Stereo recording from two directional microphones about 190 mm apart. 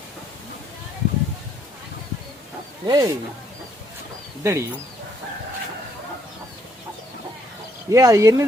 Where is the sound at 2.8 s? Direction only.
20° right (ahead or behind).